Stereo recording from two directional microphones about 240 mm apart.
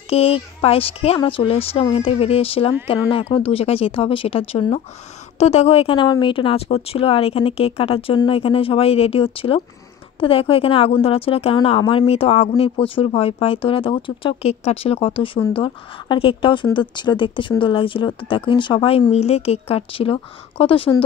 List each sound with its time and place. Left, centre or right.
0.1 s speech: left